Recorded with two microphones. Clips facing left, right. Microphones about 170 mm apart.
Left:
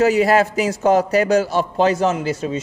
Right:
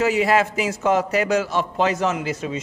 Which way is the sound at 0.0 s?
40° left (ahead or behind).